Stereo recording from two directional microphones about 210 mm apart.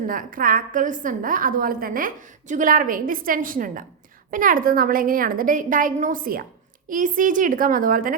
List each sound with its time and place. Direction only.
0.1 s a woman's voice: 40° right (ahead or behind)